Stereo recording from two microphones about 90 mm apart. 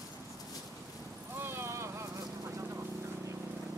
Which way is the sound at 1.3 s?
25° right (ahead or behind).